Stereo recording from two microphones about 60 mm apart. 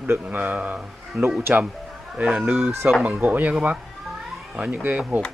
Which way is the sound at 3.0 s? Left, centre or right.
Right.